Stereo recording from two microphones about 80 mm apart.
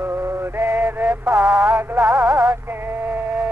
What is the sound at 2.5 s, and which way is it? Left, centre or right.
Male singing, right.